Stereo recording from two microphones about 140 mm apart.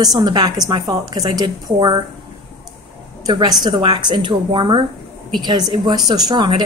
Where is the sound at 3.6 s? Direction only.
30° right (ahead or behind).